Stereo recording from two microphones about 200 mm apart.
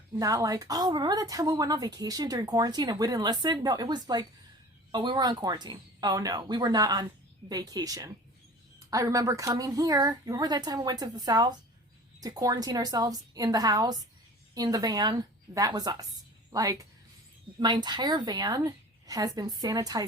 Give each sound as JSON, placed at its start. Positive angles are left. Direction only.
{"t": 0.2, "sound": "a woman's voice", "side_deg": -15}